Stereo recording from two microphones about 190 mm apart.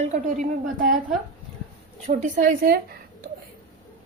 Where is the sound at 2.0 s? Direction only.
40° right (ahead or behind).